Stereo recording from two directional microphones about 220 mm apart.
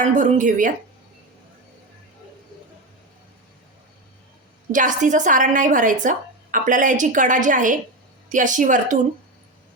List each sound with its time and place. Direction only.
0.0 s a woman's voice: 35° right (ahead or behind)
4.7 s a woman's voice: 35° right (ahead or behind)